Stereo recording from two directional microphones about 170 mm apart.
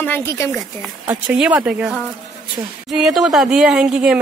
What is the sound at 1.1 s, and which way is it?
Speech, 10° right (ahead or behind).